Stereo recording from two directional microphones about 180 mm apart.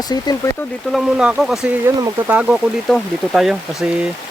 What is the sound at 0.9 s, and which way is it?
Speech, 5° right (ahead or behind).